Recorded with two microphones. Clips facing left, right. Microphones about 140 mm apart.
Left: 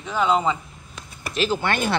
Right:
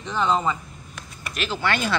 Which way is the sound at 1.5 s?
50° left (ahead or behind).